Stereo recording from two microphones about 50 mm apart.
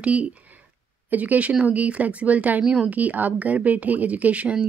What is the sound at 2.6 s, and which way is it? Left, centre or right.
Speech, centre.